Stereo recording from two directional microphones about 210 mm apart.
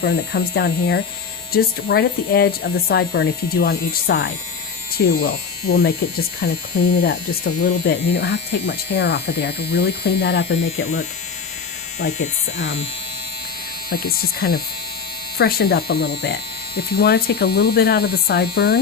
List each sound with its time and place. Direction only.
0.0 s speech: 50° left (ahead or behind)
12.1 s speech: 65° left (ahead or behind)
13.9 s speech: 45° left (ahead or behind)